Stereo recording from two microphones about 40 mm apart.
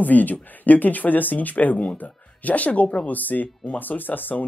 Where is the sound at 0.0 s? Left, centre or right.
Left.